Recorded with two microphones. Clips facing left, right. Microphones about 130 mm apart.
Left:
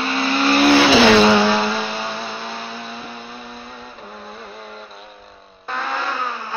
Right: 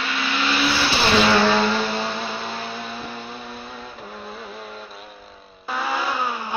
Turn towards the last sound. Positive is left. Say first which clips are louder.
# right 1 dB
turn(degrees=-10)  # may be behind; listen again after turning